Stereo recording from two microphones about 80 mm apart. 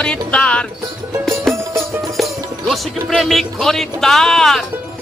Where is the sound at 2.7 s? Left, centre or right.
Centre.